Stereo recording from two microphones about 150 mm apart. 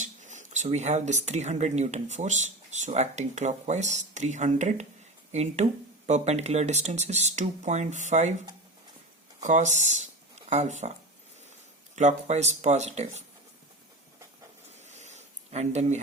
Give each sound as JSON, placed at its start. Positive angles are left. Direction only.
{"t": 0.0, "sound": "speech", "side_deg": -55}
{"t": 9.4, "sound": "speech", "side_deg": -55}
{"t": 11.9, "sound": "speech", "side_deg": -50}
{"t": 14.8, "sound": "a sound", "side_deg": -50}